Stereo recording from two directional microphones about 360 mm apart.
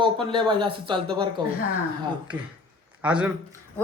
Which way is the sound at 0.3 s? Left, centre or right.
Centre.